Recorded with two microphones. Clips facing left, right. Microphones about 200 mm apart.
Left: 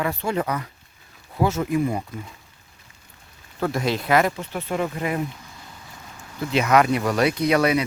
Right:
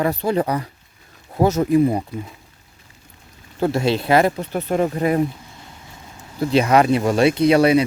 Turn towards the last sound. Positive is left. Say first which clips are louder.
# right 6 dB
turn(degrees=-30)  # may be behind; listen again after turning